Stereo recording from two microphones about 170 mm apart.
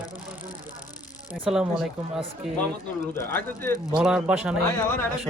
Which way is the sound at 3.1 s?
15° left (ahead or behind).